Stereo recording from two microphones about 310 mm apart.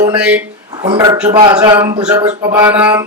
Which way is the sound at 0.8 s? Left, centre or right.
Centre.